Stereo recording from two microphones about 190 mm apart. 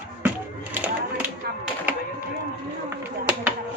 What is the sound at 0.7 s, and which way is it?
Music, 10° right (ahead or behind).